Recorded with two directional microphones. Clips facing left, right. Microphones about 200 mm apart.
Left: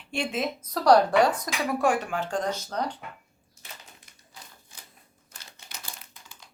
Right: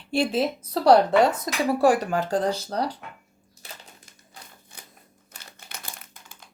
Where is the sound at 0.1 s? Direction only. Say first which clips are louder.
Right 6 dB; 35° right (ahead or behind).